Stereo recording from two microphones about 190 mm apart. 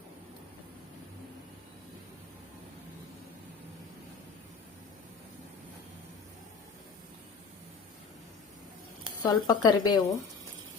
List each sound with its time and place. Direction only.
9.2 s a woman's voice: 20° left (ahead or behind)